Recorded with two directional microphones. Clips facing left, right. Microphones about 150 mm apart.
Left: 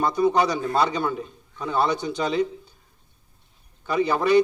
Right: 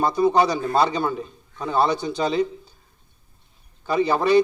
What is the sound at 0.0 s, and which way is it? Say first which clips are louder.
A man's voice: right 2 dB; 30° right (ahead or behind).